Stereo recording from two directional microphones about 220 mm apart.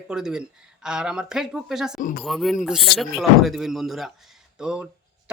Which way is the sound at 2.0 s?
35° left (ahead or behind).